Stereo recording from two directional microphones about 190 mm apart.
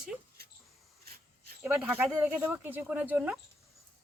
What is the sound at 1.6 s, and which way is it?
Speech, 10° right (ahead or behind).